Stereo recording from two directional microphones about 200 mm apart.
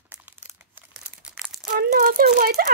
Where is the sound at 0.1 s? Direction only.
10° right (ahead or behind).